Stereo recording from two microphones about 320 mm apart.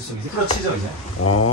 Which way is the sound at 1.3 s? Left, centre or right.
Left.